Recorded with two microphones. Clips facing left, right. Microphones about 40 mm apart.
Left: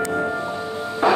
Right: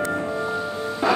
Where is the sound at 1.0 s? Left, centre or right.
Left.